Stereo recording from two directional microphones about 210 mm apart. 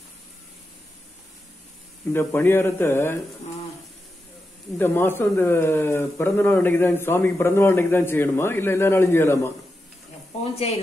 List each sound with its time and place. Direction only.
2.1 s speech: 10° left (ahead or behind)
4.7 s speech: 10° left (ahead or behind)